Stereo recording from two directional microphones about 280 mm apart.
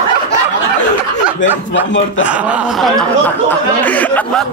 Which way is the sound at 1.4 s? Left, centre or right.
Left.